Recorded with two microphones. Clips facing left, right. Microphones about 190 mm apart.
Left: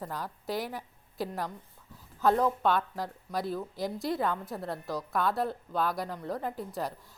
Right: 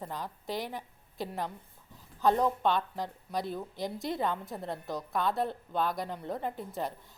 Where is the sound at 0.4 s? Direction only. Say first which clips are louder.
Left 2 dB; 5° left (ahead or behind).